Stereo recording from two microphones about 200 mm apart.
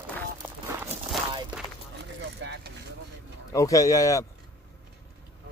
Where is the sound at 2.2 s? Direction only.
60° right (ahead or behind).